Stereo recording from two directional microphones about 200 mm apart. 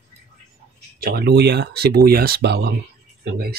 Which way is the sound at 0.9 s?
50° right (ahead or behind).